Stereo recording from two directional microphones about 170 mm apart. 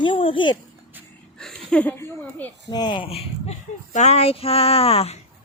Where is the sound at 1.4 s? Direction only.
5° left (ahead or behind).